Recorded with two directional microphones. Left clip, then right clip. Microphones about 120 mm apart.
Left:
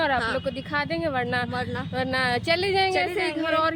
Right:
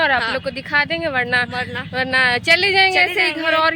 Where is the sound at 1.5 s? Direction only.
65° left (ahead or behind).